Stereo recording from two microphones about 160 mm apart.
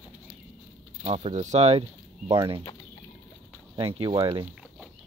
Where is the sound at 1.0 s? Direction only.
40° right (ahead or behind).